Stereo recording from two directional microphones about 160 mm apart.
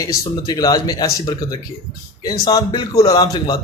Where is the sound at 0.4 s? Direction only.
25° left (ahead or behind).